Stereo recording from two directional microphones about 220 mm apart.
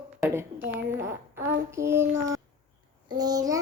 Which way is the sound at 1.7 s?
10° right (ahead or behind).